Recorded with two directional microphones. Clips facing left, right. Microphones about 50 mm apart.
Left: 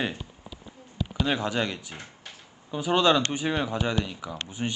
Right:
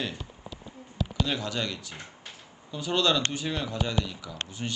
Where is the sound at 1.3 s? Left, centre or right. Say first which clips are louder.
Left 4 dB; left.